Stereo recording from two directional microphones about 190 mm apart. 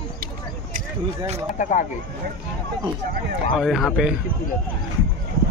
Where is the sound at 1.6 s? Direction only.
40° left (ahead or behind).